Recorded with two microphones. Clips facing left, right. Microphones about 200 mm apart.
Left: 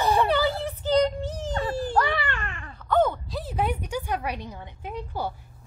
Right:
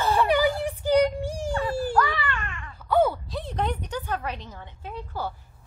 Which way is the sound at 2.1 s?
35° left (ahead or behind).